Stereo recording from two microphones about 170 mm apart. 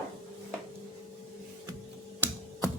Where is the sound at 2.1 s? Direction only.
10° right (ahead or behind).